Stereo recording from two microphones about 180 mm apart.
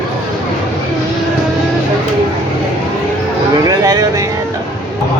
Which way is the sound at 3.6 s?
20° right (ahead or behind).